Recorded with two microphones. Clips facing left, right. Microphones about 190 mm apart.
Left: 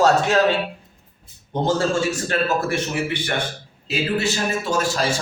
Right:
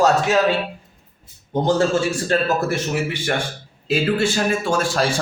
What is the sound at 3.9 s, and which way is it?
Speech, 50° right (ahead or behind).